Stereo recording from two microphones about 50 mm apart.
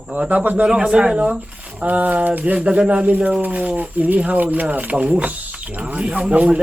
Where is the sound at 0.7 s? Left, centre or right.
Centre.